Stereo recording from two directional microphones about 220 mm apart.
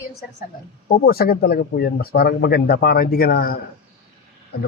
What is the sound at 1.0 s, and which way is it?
Speech, 45° left (ahead or behind).